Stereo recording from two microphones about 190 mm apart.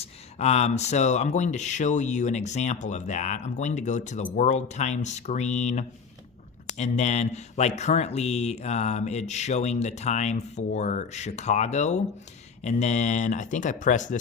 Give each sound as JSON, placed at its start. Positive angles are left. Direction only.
{"t": 0.0, "sound": "speech", "side_deg": 35}